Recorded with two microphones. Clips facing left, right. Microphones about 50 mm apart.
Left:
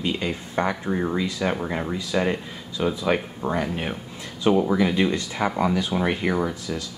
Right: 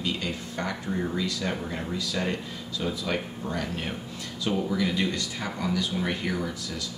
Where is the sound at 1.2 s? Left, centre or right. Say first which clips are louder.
Left 5 dB; centre.